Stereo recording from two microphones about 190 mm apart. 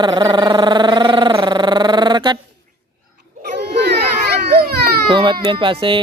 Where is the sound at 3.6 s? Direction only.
60° right (ahead or behind).